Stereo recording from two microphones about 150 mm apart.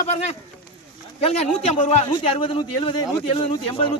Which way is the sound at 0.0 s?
50° left (ahead or behind).